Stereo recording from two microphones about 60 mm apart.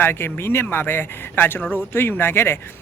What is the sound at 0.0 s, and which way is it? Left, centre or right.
Speech, left.